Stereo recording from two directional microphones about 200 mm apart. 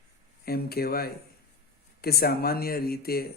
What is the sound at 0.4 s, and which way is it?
Speech, 50° left (ahead or behind).